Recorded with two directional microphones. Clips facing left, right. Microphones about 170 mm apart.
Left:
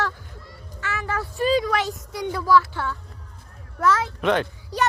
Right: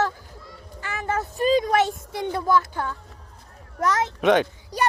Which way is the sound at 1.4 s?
45° right (ahead or behind).